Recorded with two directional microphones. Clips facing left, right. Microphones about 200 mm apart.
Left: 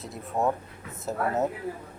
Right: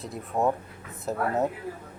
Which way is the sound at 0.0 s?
Centre (ahead or behind).